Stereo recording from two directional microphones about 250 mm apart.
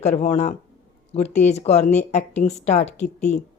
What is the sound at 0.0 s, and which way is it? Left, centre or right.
Speech, left.